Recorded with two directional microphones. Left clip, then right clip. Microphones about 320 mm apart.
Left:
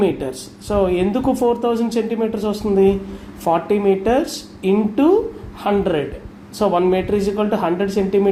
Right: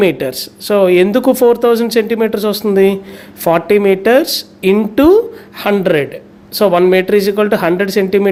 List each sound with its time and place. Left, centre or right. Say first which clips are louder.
0.7 s speech: right 8 dB; right